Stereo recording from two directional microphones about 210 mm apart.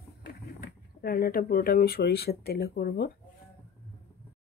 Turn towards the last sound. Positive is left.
turn(degrees=55)  # may be behind; listen again after turning